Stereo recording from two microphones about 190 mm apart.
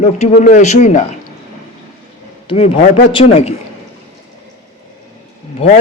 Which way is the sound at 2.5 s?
25° left (ahead or behind).